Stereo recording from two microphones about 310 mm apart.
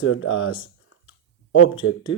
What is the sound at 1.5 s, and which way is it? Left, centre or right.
Speech, left.